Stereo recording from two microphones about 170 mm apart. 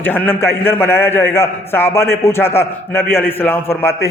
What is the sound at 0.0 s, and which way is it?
A man's voice, 10° left (ahead or behind).